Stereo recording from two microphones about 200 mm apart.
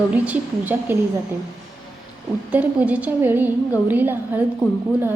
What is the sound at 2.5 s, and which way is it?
A woman's voice, 5° right (ahead or behind).